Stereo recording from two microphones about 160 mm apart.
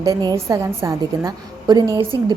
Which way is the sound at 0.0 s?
25° right (ahead or behind).